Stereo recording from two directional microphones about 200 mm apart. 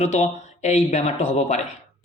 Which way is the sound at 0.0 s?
35° left (ahead or behind).